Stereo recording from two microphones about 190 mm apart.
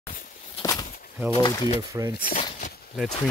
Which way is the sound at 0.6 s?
20° left (ahead or behind).